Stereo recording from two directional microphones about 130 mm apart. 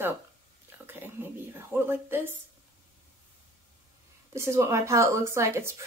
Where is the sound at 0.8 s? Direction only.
15° right (ahead or behind).